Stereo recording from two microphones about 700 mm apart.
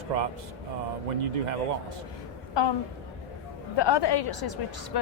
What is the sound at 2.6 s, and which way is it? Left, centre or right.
Speech, left.